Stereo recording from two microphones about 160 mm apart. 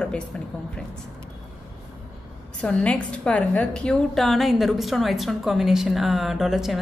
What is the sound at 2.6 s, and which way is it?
A woman's voice, 5° left (ahead or behind).